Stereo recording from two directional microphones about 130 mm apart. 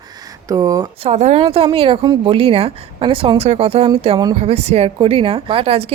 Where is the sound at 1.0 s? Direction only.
60° right (ahead or behind).